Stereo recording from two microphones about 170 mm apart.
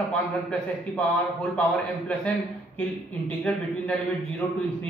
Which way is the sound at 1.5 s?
5° left (ahead or behind).